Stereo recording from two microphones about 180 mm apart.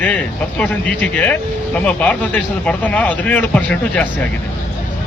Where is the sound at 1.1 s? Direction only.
10° left (ahead or behind).